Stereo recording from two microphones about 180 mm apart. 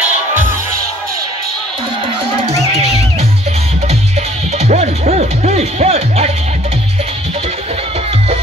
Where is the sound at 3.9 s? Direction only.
35° right (ahead or behind).